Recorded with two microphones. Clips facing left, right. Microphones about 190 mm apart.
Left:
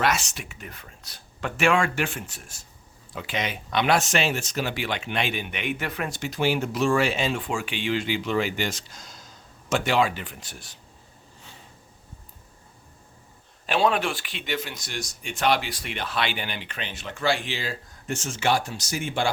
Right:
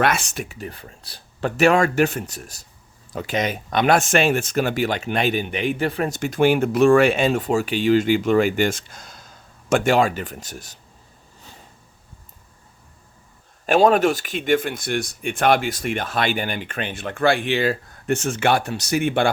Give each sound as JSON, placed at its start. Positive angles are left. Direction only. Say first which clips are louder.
{"t": 0.0, "sound": "speech", "louder": "right 4 dB", "side_deg": -55}
{"t": 0.4, "sound": "speech", "louder": "right 8 dB", "side_deg": -35}
{"t": 6.1, "sound": "speech", "louder": "right 7 dB", "side_deg": -50}
{"t": 13.7, "sound": "speech", "louder": "right 8 dB", "side_deg": -45}